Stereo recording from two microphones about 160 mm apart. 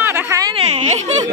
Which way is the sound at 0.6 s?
45° right (ahead or behind).